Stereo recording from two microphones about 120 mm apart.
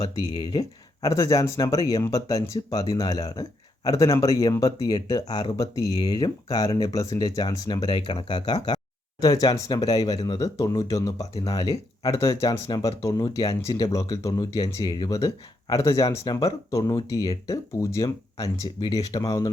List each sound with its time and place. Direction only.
1.0 s speech: 30° left (ahead or behind)